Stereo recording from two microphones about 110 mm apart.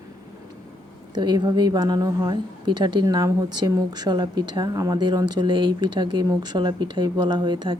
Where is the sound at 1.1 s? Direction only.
40° right (ahead or behind).